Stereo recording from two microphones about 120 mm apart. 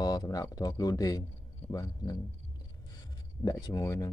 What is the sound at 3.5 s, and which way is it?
Speech, 30° left (ahead or behind).